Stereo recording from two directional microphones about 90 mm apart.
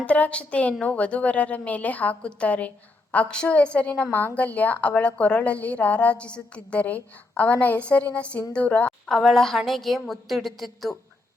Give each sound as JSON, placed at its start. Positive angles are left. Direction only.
{"t": 0.0, "sound": "a woman's voice", "side_deg": 15}
{"t": 8.9, "sound": "a woman's voice", "side_deg": 0}